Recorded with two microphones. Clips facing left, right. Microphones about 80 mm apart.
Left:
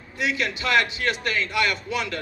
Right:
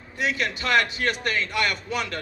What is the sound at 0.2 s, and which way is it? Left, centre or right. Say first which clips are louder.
A man's voice: even; right.